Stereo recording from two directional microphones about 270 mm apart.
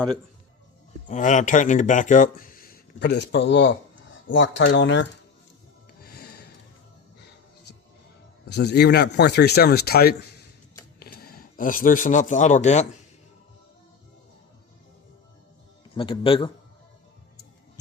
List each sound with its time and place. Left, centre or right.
1.0 s speech: left
6.1 s snort: left
8.4 s a man's voice: left
16.0 s a man's voice: centre